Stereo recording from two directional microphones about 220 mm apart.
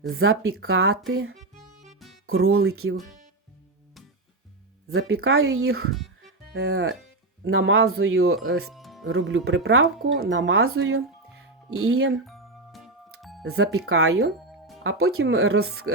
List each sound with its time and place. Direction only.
0.2 s speech: 65° right (ahead or behind)
4.9 s speech: 50° right (ahead or behind)
5.1 s speech: 70° right (ahead or behind)
6.5 s speech: 50° right (ahead or behind)
7.4 s speech: 65° right (ahead or behind)
8.7 s music: centre (ahead or behind)
9.1 s speech: 55° right (ahead or behind)
12.2 s music: centre (ahead or behind)
13.9 s speech: 75° right (ahead or behind)
14.3 s music: centre (ahead or behind)
14.8 s speech: 75° right (ahead or behind)